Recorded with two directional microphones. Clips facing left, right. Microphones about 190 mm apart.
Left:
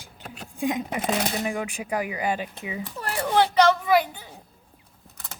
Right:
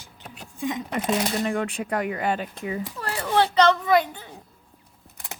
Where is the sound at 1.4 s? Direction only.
5° left (ahead or behind).